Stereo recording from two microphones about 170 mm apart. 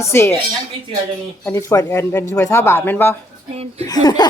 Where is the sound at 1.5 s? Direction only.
15° left (ahead or behind).